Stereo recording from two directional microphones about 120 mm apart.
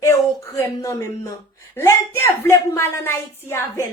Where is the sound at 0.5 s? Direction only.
25° left (ahead or behind).